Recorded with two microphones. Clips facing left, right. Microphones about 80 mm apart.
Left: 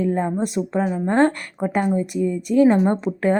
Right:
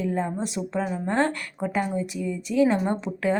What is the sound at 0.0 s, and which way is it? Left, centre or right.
A woman's voice, left.